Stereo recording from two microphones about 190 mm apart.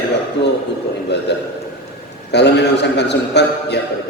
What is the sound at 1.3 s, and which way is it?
A man's voice, 65° left (ahead or behind).